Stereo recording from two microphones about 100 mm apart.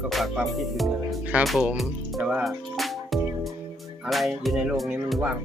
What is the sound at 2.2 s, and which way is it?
Speech, 10° right (ahead or behind).